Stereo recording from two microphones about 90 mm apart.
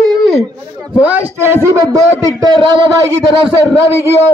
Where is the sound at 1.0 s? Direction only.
20° right (ahead or behind).